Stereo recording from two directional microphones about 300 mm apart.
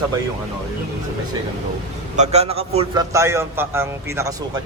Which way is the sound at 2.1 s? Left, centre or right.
Right.